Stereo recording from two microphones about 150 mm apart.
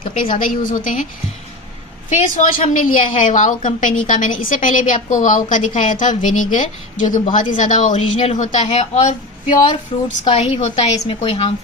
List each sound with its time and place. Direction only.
0.0 s a woman's voice: 65° left (ahead or behind)
2.0 s a woman's voice: 55° left (ahead or behind); by 11.5 s 40° left (ahead or behind)